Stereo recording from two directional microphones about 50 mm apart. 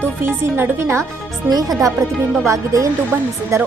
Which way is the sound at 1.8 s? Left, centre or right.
Right.